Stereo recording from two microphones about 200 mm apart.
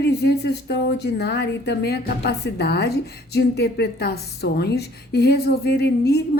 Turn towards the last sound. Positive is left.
turn(degrees=55)  # may be behind; listen again after turning